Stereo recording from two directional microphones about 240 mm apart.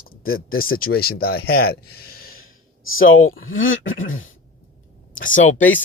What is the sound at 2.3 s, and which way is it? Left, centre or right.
Speech, left.